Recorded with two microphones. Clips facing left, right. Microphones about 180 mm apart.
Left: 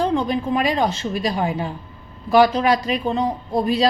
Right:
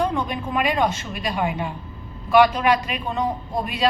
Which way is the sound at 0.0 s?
30° left (ahead or behind).